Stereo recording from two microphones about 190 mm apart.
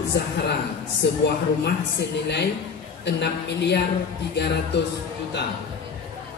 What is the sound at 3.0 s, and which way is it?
A woman's voice, 60° left (ahead or behind).